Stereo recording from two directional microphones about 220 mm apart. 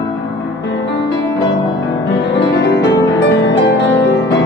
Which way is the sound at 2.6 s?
50° left (ahead or behind).